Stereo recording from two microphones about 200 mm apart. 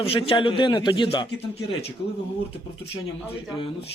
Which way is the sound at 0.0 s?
30° left (ahead or behind).